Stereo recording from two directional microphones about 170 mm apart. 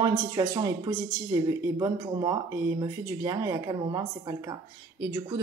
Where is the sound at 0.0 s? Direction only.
25° right (ahead or behind).